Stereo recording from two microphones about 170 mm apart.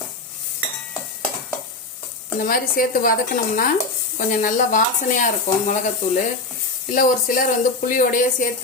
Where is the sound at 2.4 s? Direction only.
55° left (ahead or behind).